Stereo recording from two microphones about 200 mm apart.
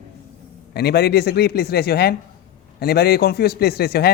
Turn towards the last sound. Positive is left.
turn(degrees=50)  # may be behind; listen again after turning